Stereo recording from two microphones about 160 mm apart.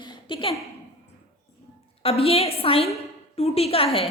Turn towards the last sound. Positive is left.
turn(degrees=35)  # may be behind; listen again after turning